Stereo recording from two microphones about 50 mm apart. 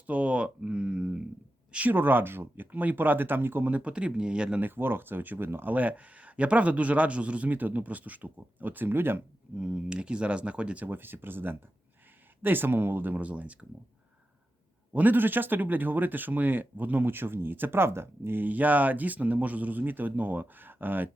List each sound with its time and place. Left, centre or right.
0.1 s a sound: right
1.9 s speech: right
3.7 s a man's voice: right
4.6 s speech: right
5.7 s a man's voice: right
9.6 s a man's voice: centre
10.8 s speech: right
14.9 s speech: right